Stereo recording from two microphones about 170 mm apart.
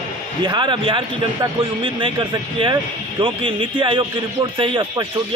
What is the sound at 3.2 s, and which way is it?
A man's voice, 30° right (ahead or behind).